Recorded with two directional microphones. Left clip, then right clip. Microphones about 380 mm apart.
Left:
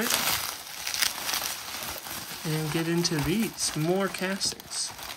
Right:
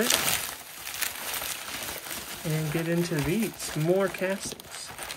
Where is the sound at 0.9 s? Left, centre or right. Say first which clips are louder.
Left 6 dB; centre.